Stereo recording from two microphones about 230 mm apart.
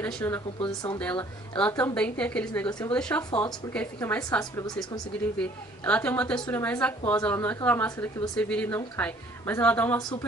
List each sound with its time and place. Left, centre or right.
0.0 s a woman's voice: centre